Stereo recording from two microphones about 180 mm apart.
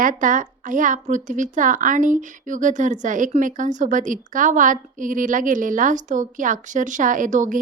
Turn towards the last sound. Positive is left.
turn(degrees=-45)  # may be behind; listen again after turning